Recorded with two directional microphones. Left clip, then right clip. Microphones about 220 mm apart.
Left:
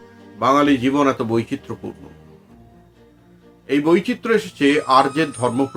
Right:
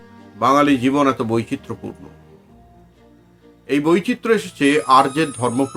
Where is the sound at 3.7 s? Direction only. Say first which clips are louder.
Even; 15° right (ahead or behind).